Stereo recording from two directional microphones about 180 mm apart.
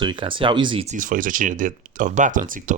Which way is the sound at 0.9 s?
50° right (ahead or behind).